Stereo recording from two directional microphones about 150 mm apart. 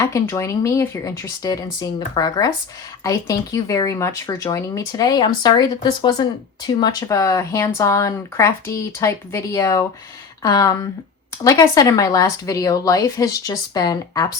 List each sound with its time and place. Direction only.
0.0 s speech: 20° left (ahead or behind)